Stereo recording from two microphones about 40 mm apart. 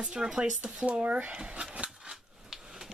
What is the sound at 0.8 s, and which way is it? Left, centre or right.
Speech, right.